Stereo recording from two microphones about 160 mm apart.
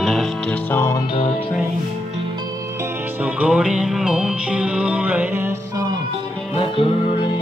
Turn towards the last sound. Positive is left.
turn(degrees=35)  # may be behind; listen again after turning